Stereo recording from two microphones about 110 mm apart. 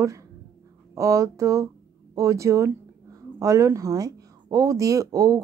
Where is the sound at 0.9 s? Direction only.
30° right (ahead or behind).